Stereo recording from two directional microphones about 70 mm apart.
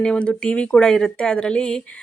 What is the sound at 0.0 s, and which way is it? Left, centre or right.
A woman's voice, centre.